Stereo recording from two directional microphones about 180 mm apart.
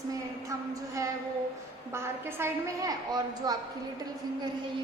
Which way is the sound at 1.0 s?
15° right (ahead or behind).